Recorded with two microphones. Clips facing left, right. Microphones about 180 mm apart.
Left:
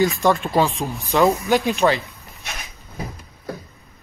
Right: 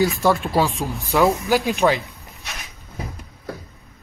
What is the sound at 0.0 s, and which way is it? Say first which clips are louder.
Speech: even; 5° right (ahead or behind).